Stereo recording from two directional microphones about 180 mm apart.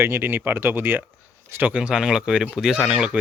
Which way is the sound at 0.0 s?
10° right (ahead or behind).